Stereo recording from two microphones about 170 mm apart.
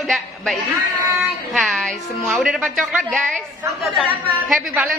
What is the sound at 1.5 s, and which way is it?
A woman's voice, centre (ahead or behind).